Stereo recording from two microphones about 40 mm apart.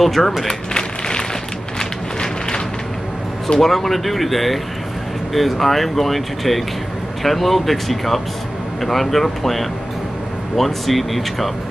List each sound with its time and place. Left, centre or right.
0.0 s speech: centre
0.5 s a sound: centre
3.5 s speech: centre